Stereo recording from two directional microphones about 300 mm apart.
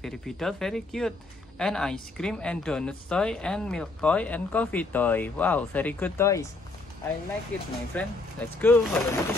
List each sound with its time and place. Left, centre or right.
0.0 s speech: centre
7.5 s speech: centre